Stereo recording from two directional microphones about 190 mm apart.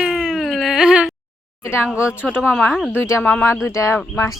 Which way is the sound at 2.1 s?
10° left (ahead or behind).